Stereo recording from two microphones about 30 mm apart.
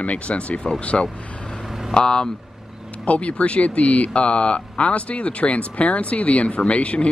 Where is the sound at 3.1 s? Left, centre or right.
Left.